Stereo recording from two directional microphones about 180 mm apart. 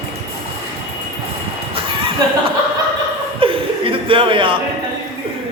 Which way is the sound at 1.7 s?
30° right (ahead or behind).